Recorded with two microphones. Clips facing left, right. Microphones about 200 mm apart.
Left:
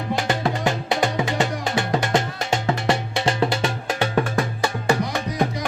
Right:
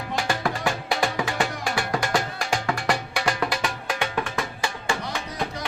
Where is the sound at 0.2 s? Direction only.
20° left (ahead or behind); by 5.5 s 40° left (ahead or behind).